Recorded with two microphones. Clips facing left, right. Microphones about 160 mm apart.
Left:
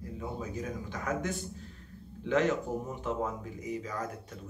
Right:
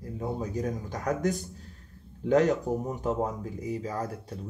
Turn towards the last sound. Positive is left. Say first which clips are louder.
# right 4 dB
turn(degrees=-30)  # may be behind; listen again after turning